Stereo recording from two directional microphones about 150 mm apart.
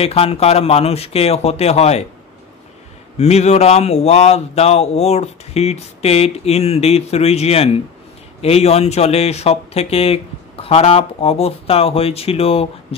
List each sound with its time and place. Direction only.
0.0 s speech: 40° left (ahead or behind)
3.2 s speech: 45° left (ahead or behind)